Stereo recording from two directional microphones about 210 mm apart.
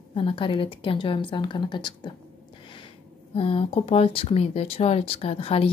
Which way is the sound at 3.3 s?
25° left (ahead or behind).